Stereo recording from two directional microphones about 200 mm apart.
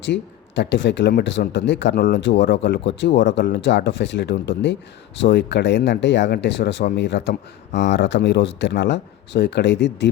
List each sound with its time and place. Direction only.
0.0 s speech: 60° left (ahead or behind)